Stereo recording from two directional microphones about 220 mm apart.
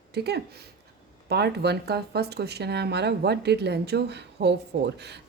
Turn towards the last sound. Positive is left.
turn(degrees=-50)  # may be behind; listen again after turning